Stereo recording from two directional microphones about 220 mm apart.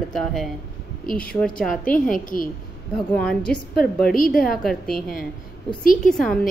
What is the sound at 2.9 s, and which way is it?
Speech, 5° left (ahead or behind).